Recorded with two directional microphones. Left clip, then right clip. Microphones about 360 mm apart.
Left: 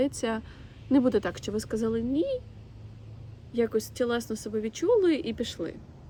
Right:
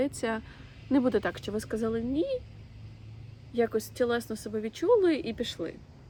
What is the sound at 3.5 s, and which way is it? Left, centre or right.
Speech, centre.